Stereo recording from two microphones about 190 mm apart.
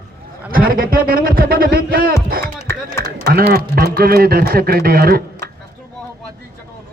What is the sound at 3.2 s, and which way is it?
A man's voice, 55° right (ahead or behind).